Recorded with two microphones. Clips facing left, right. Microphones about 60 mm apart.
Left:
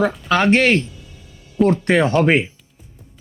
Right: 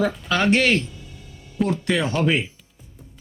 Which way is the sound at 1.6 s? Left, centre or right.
Left.